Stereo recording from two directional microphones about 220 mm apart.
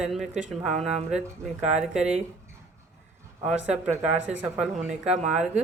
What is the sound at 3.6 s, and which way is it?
A woman's voice, 5° right (ahead or behind).